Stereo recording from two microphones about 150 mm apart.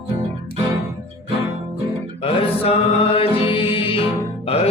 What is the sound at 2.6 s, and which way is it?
Music, 40° left (ahead or behind).